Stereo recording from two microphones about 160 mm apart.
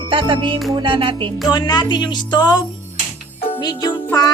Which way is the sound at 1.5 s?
25° left (ahead or behind).